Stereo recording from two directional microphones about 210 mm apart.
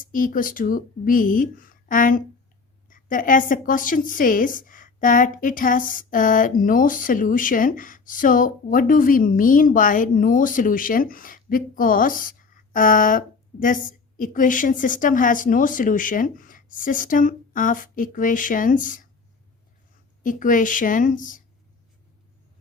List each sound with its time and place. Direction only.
0.0 s a woman's voice: 40° left (ahead or behind)
20.2 s a woman's voice: 40° left (ahead or behind)